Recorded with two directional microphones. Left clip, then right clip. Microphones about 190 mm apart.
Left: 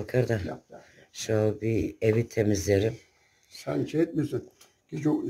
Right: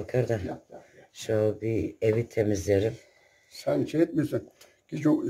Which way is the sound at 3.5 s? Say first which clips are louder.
Right 3 dB; 20° right (ahead or behind).